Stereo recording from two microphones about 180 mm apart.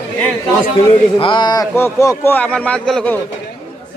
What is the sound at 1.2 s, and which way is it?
A man's voice, 25° left (ahead or behind).